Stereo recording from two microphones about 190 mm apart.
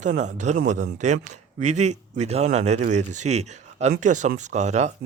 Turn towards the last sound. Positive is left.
turn(degrees=-35)  # may be behind; listen again after turning